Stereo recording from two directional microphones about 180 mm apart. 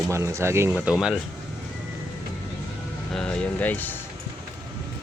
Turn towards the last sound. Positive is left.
turn(degrees=10)  # may be behind; listen again after turning